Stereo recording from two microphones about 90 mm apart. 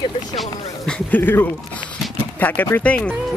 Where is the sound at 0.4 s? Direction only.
10° left (ahead or behind).